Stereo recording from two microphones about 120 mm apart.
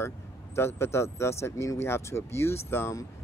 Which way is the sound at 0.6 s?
20° left (ahead or behind).